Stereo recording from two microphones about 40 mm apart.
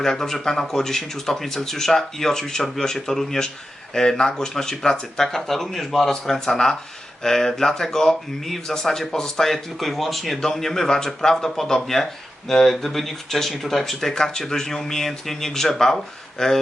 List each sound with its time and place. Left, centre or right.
0.0 s speech: centre